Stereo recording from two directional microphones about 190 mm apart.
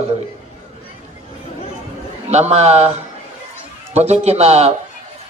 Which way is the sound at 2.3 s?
35° right (ahead or behind).